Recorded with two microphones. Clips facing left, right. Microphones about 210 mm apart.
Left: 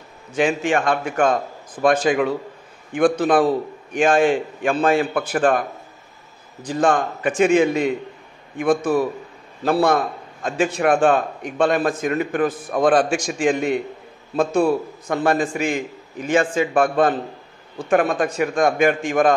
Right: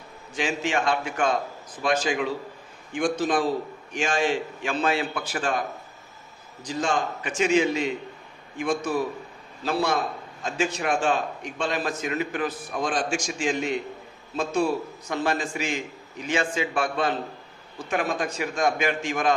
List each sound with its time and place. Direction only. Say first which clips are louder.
0.4 s a man's voice: left 7 dB; 55° left (ahead or behind)
6.6 s a man's voice: left 7 dB; 55° left (ahead or behind)